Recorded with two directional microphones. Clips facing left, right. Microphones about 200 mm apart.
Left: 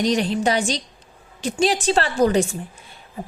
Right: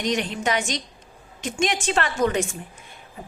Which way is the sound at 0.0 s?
35° left (ahead or behind).